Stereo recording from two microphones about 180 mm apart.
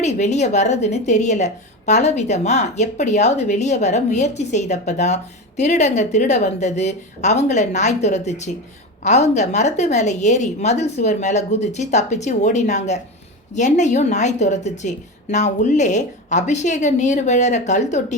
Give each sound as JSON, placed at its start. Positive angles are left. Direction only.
{"t": 0.0, "sound": "a woman's voice", "side_deg": 40}